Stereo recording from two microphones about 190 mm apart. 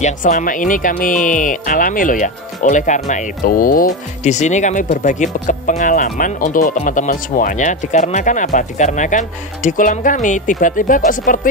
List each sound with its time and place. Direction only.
0.0 s speech: 45° left (ahead or behind)